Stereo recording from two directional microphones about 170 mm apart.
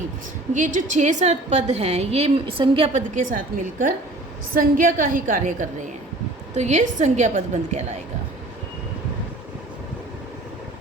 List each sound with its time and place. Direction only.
0.5 s a woman's voice: 50° right (ahead or behind)
3.2 s a woman's voice: 50° right (ahead or behind)